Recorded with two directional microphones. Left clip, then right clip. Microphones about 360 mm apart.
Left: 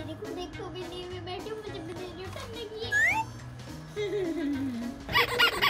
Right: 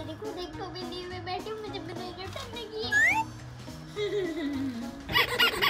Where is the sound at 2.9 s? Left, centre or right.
Centre.